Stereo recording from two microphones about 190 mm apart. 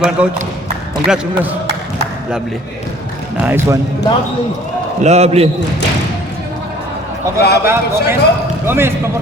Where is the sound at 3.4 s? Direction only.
10° right (ahead or behind).